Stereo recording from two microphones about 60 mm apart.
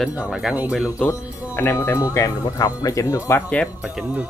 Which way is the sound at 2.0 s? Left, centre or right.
Left.